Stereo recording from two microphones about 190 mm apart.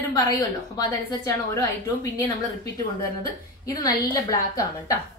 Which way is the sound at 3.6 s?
20° left (ahead or behind).